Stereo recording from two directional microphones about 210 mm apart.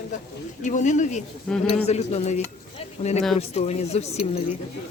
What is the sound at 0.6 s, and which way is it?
Speech, 35° left (ahead or behind).